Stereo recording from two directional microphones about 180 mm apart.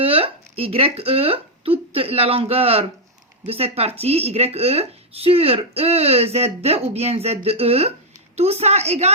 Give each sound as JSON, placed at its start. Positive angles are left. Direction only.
{"t": 0.0, "sound": "speech", "side_deg": -30}